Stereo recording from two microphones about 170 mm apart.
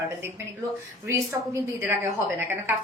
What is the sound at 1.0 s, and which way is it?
Speech, 15° right (ahead or behind).